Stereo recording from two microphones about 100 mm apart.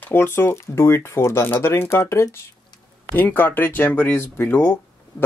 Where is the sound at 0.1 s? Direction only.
20° left (ahead or behind).